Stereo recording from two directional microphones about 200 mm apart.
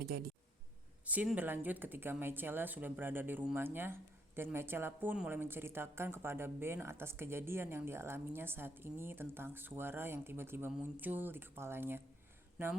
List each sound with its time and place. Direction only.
0.0 s speech: 50° right (ahead or behind)
1.0 s speech: 5° right (ahead or behind)